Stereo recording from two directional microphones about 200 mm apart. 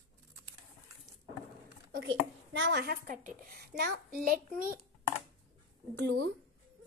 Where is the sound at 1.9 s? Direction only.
65° right (ahead or behind).